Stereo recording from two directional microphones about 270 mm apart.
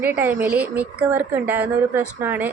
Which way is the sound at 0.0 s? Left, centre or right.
Centre.